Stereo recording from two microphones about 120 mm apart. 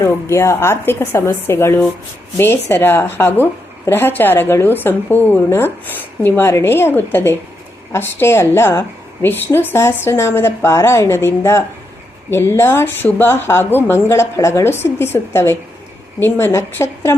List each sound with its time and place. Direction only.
0.0 s a woman's voice: 25° left (ahead or behind)